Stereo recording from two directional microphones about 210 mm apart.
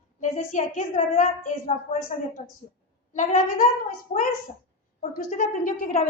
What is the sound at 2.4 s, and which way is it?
A woman's voice, 30° left (ahead or behind).